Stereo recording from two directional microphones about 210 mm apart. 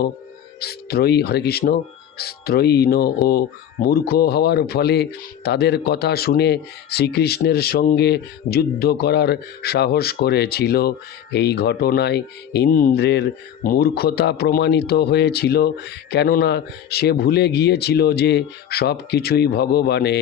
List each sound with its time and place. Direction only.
0.6 s speech: 50° left (ahead or behind)